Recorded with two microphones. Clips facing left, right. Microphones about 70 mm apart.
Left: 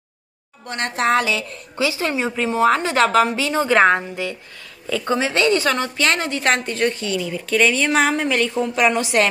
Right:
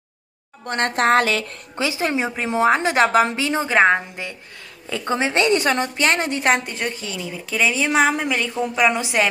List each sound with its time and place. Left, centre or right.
0.7 s a woman's voice: right
1.8 s a woman's voice: right
3.7 s a woman's voice: centre
4.8 s a woman's voice: right
6.4 s a woman's voice: centre